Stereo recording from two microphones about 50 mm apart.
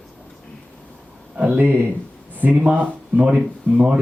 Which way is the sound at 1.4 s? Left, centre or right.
Right.